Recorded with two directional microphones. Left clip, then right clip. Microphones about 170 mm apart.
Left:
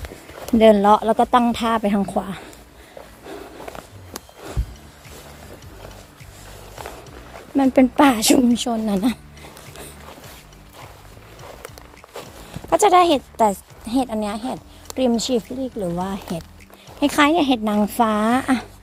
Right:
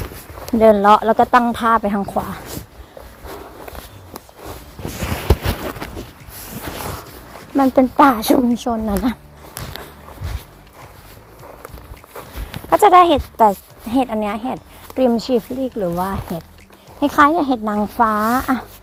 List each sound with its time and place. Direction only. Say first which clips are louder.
0.8 s speech: right 3 dB; centre (ahead or behind)
1.3 s speech: right 4 dB; 20° left (ahead or behind)
7.5 s speech: right 2 dB; 20° left (ahead or behind)
8.1 s a woman's voice: right 1 dB; 10° left (ahead or behind)
8.4 s speech: right 1 dB; centre (ahead or behind)
12.7 s speech: right 4 dB; centre (ahead or behind)
16.0 s speech: right 4 dB; centre (ahead or behind)
17.9 s speech: right 4 dB; 25° left (ahead or behind)